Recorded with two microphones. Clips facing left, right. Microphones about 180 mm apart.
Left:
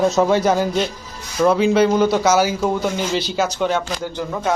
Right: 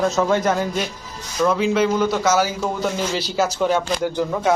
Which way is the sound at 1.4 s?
30° left (ahead or behind).